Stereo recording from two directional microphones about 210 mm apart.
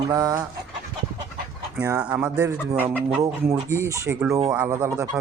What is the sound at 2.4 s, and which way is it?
Speech, 10° right (ahead or behind).